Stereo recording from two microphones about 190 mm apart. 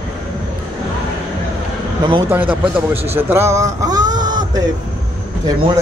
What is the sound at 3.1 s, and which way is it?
Speech, 10° right (ahead or behind).